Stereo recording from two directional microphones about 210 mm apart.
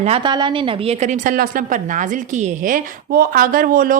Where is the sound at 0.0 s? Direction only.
25° right (ahead or behind).